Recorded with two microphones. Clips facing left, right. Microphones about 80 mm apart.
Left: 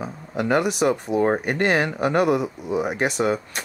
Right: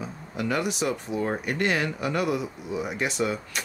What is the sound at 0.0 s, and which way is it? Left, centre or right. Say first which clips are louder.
Speech: left 5 dB; left.